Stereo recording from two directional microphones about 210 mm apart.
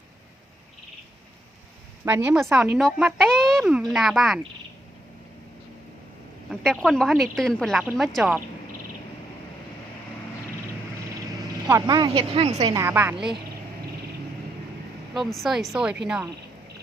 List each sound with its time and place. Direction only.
2.0 s speech: 5° right (ahead or behind)
6.5 s speech: centre (ahead or behind)
11.9 s a woman's voice: 20° right (ahead or behind)
12.7 s a woman's voice: 10° right (ahead or behind)
15.1 s speech: centre (ahead or behind)